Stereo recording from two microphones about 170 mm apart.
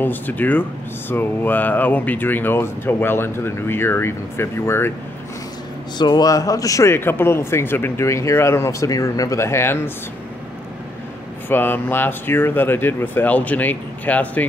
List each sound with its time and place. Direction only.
0.0 s speech: 10° left (ahead or behind)
5.9 s speech: 25° left (ahead or behind)
11.4 s speech: 10° left (ahead or behind)